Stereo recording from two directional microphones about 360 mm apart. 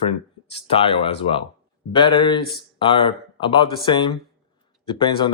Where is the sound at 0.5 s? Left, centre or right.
Centre.